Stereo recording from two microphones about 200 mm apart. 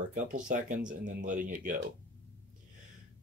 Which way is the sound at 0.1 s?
40° right (ahead or behind).